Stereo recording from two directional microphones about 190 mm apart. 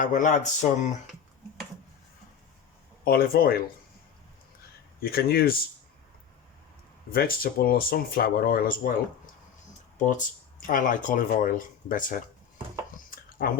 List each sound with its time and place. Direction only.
0.0 s a sound: 45° left (ahead or behind)
3.0 s speech: 50° left (ahead or behind)
4.9 s speech: 50° left (ahead or behind)
7.1 s speech: 50° left (ahead or behind)
10.0 s a sound: 40° left (ahead or behind)
10.7 s speech: 45° left (ahead or behind)
13.4 s speech: 50° left (ahead or behind)